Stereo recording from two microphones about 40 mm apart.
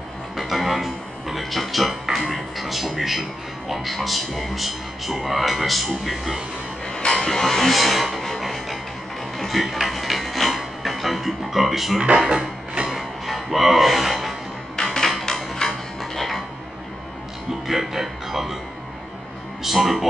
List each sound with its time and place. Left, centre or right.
0.4 s music: centre
2.3 s speech: centre
6.9 s music: centre
7.2 s music: centre
12.0 s music: right
13.3 s speech: centre
15.0 s music: centre
17.6 s speech: centre
19.6 s speech: centre